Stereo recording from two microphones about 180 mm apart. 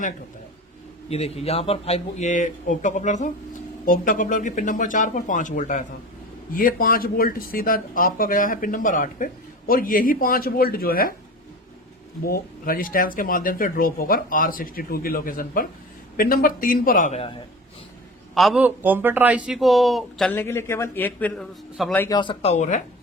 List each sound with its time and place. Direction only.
1.1 s speech: 35° left (ahead or behind); by 11.1 s 55° left (ahead or behind)
12.2 s speech: 55° left (ahead or behind); by 17.3 s 35° left (ahead or behind)
18.3 s a man's voice: 5° right (ahead or behind)
20.3 s a man's voice: 10° left (ahead or behind)
22.0 s speech: 25° left (ahead or behind); by 22.8 s 40° left (ahead or behind)